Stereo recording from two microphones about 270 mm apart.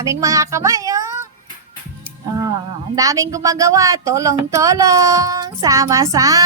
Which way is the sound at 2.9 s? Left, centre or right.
Centre.